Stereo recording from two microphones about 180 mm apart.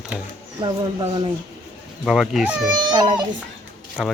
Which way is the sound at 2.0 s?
Centre (ahead or behind).